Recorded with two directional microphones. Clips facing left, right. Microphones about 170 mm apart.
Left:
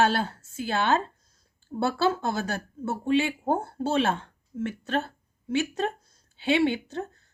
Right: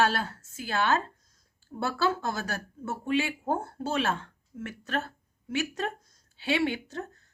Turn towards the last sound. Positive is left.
turn(degrees=25)  # may be behind; listen again after turning